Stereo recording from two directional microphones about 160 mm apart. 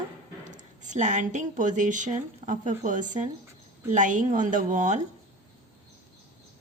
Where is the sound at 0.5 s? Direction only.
50° right (ahead or behind).